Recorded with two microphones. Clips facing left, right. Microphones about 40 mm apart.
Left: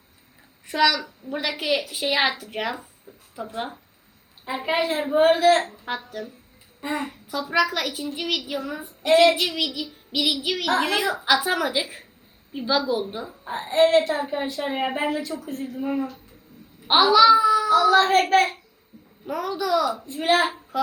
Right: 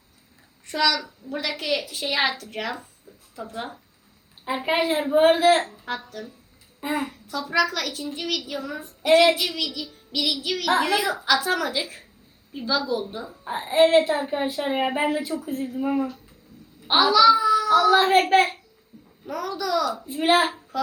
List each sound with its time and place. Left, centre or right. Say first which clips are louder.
0.7 s a woman's voice: left 2 dB; centre
4.4 s a child's voice: right 1 dB; centre
5.8 s a woman's voice: left 1 dB; centre
6.8 s a woman's voice: right 1 dB; centre
7.1 s a woman's voice: left 1 dB; centre
9.0 s a woman's voice: even; centre
9.3 s a woman's voice: left 2 dB; centre
13.4 s a child's voice: right 1 dB; centre
16.8 s a child's voice: left 1 dB; centre
19.2 s a woman's voice: left 2 dB; centre
20.1 s a child's voice: right 3 dB; centre